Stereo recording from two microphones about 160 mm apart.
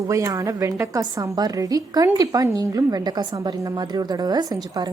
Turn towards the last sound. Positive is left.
turn(degrees=-25)  # may be behind; listen again after turning